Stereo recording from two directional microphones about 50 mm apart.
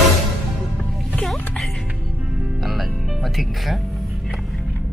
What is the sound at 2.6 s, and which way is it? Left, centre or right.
Music, centre.